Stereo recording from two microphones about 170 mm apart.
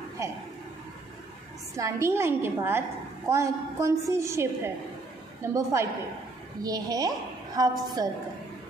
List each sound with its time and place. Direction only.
0.2 s speech: 15° right (ahead or behind)
1.8 s a woman's voice: 15° right (ahead or behind)